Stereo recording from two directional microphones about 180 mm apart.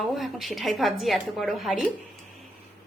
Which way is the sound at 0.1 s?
Centre (ahead or behind).